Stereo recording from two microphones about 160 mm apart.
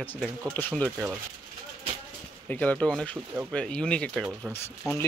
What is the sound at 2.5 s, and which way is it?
Speech, 10° left (ahead or behind).